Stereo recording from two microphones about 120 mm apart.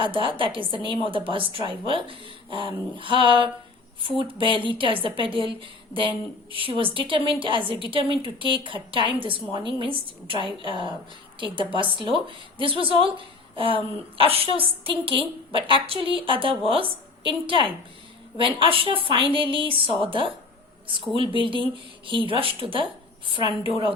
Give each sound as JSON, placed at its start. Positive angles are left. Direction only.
{"t": 0.0, "sound": "a woman's voice", "side_deg": -45}